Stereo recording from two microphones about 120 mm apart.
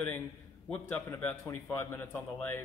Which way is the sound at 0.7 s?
10° left (ahead or behind).